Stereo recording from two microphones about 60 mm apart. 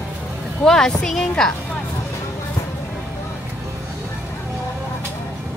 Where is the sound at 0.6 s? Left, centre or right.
Centre.